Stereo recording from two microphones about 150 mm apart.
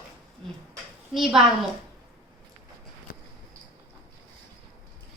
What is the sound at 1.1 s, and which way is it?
Speech, centre (ahead or behind).